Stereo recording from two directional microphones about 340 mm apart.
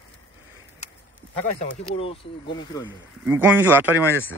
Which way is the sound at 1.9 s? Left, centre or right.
Centre.